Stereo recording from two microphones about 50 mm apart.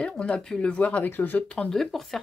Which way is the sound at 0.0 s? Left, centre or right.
Left.